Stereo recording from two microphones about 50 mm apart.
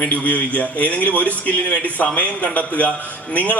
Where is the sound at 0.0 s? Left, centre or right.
Left.